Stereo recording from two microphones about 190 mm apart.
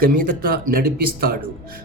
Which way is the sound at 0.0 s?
50° right (ahead or behind).